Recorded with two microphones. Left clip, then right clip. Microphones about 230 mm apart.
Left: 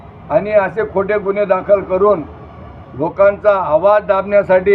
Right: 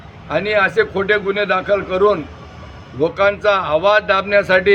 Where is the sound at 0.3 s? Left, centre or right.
Right.